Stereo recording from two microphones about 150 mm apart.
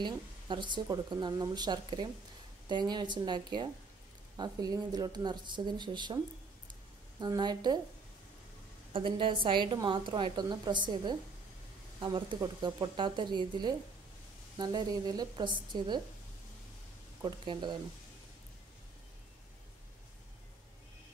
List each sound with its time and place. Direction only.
0.0 s a woman's voice: 30° right (ahead or behind)
7.2 s speech: 30° right (ahead or behind)
8.9 s a woman's voice: 35° right (ahead or behind)
17.2 s a woman's voice: 30° right (ahead or behind)